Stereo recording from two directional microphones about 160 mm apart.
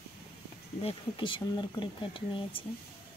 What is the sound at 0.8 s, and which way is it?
Speech, 30° left (ahead or behind).